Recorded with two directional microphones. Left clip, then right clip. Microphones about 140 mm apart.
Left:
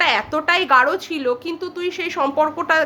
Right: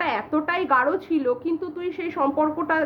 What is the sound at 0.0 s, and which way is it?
A woman's voice, 15° left (ahead or behind).